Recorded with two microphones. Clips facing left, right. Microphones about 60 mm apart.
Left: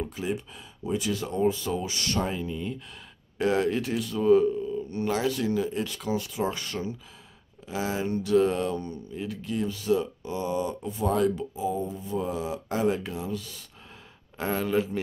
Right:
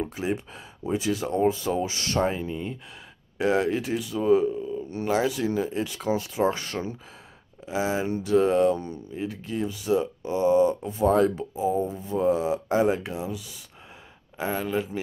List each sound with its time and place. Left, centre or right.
0.8 s speech: right
9.7 s speech: centre
9.9 s speech: right
13.3 s speech: centre